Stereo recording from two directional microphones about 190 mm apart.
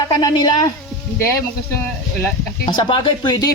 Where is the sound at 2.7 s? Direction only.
25° left (ahead or behind).